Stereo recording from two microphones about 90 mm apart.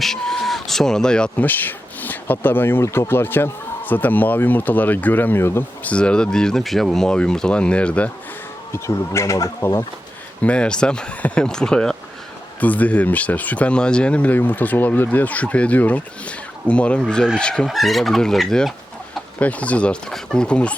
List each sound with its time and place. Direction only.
0.0 s speech: 5° left (ahead or behind)
1.5 s speech: 20° left (ahead or behind)
5.9 s speech: 10° left (ahead or behind)
8.7 s speech: 30° left (ahead or behind)
10.4 s speech: 10° left (ahead or behind)
19.4 s speech: 15° left (ahead or behind)